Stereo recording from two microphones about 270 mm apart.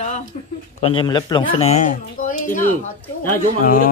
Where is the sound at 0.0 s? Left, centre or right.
Left.